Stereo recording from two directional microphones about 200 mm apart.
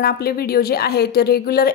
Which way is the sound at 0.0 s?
50° left (ahead or behind).